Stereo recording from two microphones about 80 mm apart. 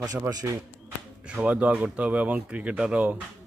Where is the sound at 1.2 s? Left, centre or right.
Centre.